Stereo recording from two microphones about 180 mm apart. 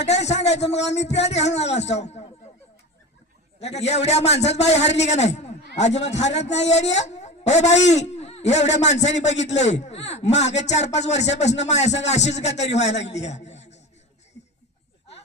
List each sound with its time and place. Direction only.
0.0 s a man's voice: 35° left (ahead or behind)
3.6 s a man's voice: 35° left (ahead or behind)
7.7 s a man's voice: 80° left
7.9 s a man's voice: 40° left (ahead or behind)